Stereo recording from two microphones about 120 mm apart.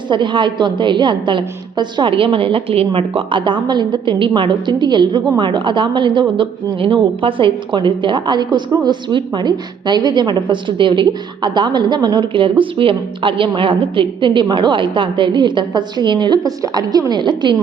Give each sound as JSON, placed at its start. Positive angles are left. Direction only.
{"t": 0.1, "sound": "a woman's voice", "side_deg": -40}